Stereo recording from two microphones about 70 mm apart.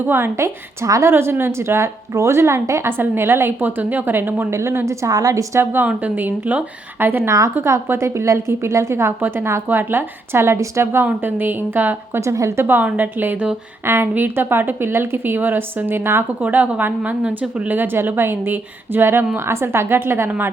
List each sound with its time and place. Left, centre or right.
0.0 s a woman's voice: right
1.1 s a woman's voice: right
4.9 s a woman's voice: right
5.8 s a woman's voice: right
7.3 s a woman's voice: right
7.5 s a woman's voice: right
11.0 s a woman's voice: right
12.2 s a woman's voice: right
12.6 s a woman's voice: right
13.8 s a woman's voice: right
16.4 s a woman's voice: right